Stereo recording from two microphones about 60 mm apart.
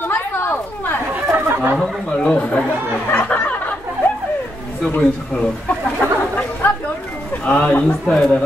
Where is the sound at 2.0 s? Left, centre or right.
Centre.